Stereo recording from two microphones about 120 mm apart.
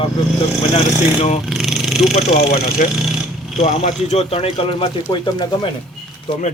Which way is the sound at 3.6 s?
65° left (ahead or behind).